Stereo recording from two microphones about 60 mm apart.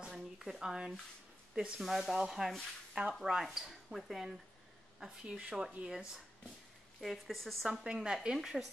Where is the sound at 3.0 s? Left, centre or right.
Right.